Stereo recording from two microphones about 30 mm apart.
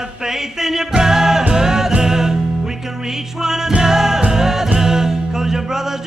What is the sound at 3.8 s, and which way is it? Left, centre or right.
Music, centre.